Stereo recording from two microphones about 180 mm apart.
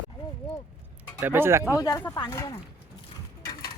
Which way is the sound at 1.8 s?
15° left (ahead or behind).